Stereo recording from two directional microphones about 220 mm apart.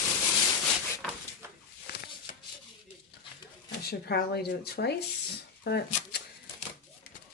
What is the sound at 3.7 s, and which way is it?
Speech, 45° left (ahead or behind).